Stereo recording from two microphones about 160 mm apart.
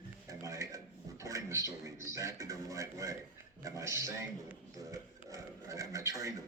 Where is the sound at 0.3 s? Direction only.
20° right (ahead or behind).